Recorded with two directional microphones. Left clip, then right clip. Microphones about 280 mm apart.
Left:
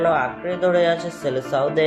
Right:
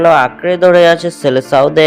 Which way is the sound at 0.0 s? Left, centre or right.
Right.